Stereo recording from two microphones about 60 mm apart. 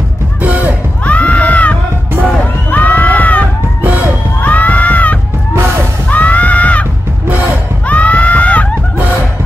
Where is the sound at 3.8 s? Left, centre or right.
Right.